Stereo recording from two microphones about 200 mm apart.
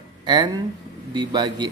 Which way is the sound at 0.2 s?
20° right (ahead or behind).